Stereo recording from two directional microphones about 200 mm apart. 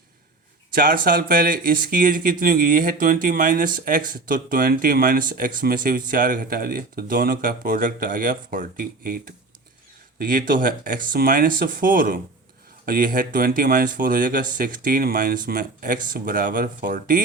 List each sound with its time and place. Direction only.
0.7 s a man's voice: 45° right (ahead or behind)